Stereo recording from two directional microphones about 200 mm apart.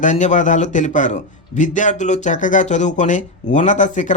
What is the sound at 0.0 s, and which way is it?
Speech, 35° left (ahead or behind).